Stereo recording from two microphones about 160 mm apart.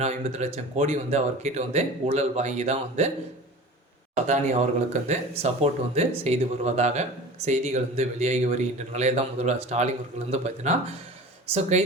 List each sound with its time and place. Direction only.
0.0 s speech: 45° right (ahead or behind)
4.3 s speech: 45° right (ahead or behind)